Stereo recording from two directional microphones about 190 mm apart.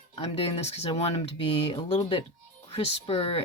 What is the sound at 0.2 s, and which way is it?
Speech, 30° left (ahead or behind).